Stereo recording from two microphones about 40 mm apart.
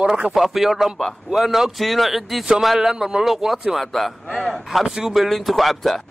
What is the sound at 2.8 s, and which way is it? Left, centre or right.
Speech, centre.